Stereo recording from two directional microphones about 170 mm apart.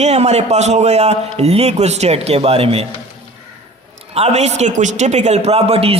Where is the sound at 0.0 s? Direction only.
40° right (ahead or behind).